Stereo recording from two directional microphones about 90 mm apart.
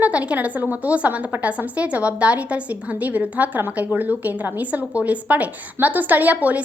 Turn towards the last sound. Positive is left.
turn(degrees=-20)  # may be behind; listen again after turning